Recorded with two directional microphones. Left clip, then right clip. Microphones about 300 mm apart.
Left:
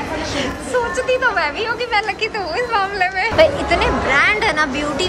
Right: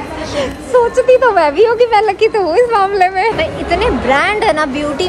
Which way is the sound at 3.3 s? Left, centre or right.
Centre.